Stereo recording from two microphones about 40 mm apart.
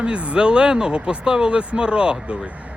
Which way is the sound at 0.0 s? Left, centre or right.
Right.